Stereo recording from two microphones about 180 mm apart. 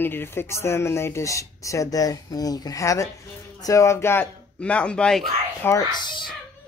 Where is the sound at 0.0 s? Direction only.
10° left (ahead or behind).